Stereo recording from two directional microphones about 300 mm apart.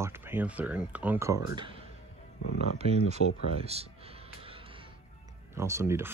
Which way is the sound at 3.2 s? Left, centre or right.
Left.